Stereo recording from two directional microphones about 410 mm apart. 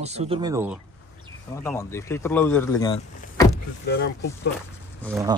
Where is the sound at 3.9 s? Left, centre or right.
Left.